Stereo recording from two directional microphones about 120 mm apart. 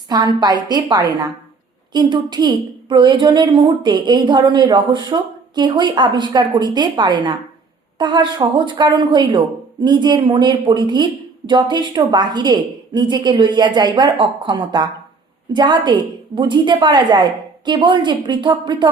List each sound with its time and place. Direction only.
0.3 s a woman's voice: 35° right (ahead or behind)